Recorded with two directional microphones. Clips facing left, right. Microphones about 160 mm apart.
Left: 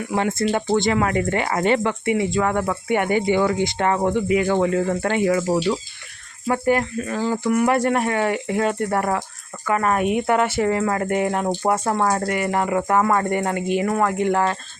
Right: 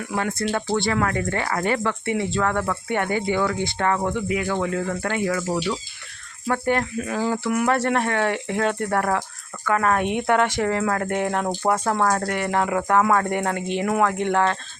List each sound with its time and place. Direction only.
0.5 s speech: 20° left (ahead or behind)
6.5 s speech: 5° left (ahead or behind)
6.9 s speech: 5° right (ahead or behind)